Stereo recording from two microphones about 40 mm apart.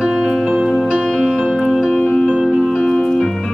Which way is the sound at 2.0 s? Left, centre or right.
Left.